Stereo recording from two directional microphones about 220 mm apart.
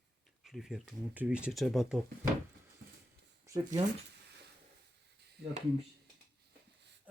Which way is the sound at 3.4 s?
15° right (ahead or behind).